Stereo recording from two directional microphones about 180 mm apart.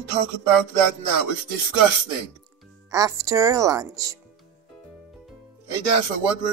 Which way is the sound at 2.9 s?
20° right (ahead or behind).